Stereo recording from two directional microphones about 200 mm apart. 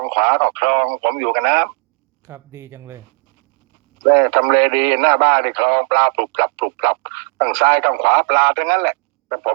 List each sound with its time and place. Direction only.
0.0 s speech: 60° right (ahead or behind)
2.2 s speech: 15° right (ahead or behind)
4.1 s speech: 60° right (ahead or behind)